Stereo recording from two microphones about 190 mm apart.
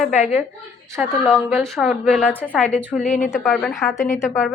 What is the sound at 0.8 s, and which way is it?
Speech, 15° right (ahead or behind).